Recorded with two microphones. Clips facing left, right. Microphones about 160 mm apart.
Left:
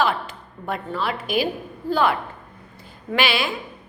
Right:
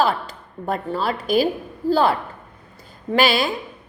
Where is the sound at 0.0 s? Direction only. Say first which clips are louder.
Right 2 dB; 35° right (ahead or behind).